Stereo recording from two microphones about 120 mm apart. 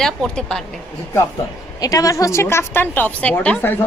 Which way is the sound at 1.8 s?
30° left (ahead or behind).